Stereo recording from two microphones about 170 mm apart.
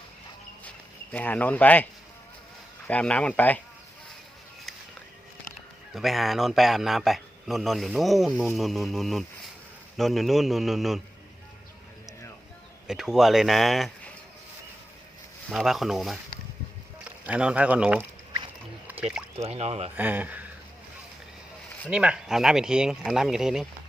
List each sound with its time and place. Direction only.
1.1 s speech: 10° left (ahead or behind)
5.9 s a man's voice: centre (ahead or behind)
12.9 s a man's voice: 5° right (ahead or behind)
15.4 s a man's voice: centre (ahead or behind)
18.9 s a sound: 5° right (ahead or behind)
19.5 s speech: 40° right (ahead or behind)
20.0 s speech: 10° right (ahead or behind)
21.8 s a man's voice: 5° right (ahead or behind)